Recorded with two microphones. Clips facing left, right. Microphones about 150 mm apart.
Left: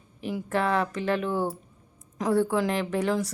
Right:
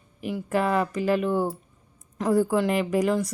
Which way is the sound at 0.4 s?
5° right (ahead or behind).